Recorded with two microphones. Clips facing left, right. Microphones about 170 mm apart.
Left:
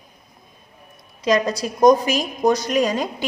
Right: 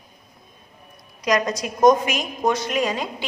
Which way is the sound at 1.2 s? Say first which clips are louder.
Left 2 dB; 30° left (ahead or behind).